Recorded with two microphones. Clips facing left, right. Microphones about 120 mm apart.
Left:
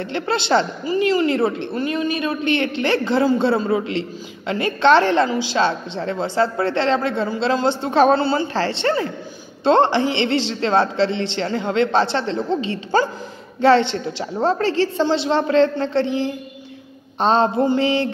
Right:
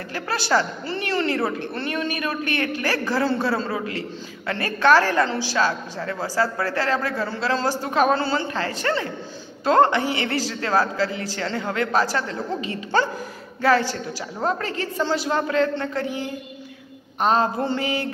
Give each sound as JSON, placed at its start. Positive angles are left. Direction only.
{"t": 0.1, "sound": "speech", "side_deg": 25}
{"t": 0.8, "sound": "speech", "side_deg": 15}